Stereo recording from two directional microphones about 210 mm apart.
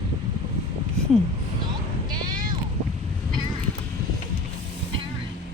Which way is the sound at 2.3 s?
40° right (ahead or behind).